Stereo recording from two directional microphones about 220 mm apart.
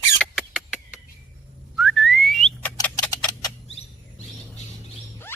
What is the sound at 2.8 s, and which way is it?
Tick-tock, 10° left (ahead or behind).